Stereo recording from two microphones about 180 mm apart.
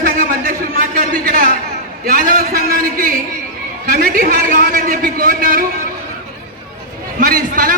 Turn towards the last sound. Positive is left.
turn(degrees=-50)  # may be behind; listen again after turning